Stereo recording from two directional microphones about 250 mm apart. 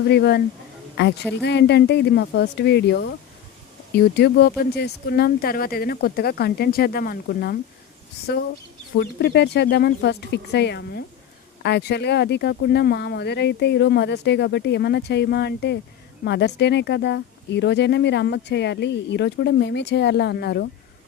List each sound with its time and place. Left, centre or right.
0.1 s speech: left
9.0 s speech: left